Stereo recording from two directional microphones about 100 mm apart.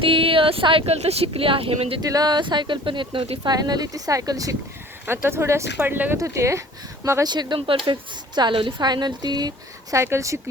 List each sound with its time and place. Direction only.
0.0 s speech: 65° right (ahead or behind)
2.0 s speech: 40° right (ahead or behind); by 3.3 s 60° right (ahead or behind)
3.4 s speech: 40° right (ahead or behind)
5.0 s speech: 25° right (ahead or behind)
6.1 s speech: 30° right (ahead or behind)
9.9 s speech: 30° right (ahead or behind)